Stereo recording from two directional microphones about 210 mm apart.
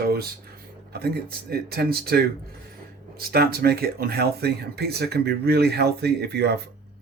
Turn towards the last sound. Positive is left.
turn(degrees=-50)  # may be behind; listen again after turning